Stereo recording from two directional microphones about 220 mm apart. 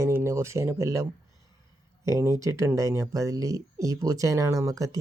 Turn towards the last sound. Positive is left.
turn(degrees=-15)  # may be behind; listen again after turning